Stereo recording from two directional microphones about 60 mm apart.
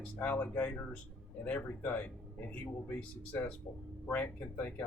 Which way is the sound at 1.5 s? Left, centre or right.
Left.